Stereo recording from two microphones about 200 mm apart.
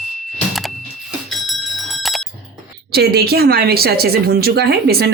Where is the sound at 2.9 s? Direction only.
55° right (ahead or behind).